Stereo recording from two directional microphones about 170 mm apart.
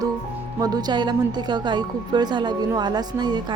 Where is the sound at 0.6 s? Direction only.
25° right (ahead or behind).